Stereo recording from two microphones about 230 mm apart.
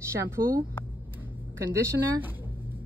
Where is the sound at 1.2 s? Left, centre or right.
Centre.